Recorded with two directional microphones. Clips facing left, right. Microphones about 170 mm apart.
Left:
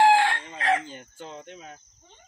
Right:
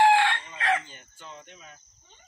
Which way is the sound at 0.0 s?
40° left (ahead or behind).